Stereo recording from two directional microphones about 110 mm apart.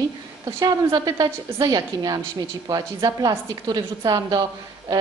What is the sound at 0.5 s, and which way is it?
A woman's voice, 35° right (ahead or behind).